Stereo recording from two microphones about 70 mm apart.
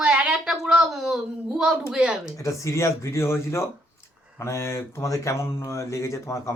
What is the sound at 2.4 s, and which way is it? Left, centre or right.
Speech, left.